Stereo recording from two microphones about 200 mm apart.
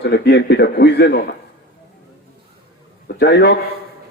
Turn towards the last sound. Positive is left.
turn(degrees=55)  # may be behind; listen again after turning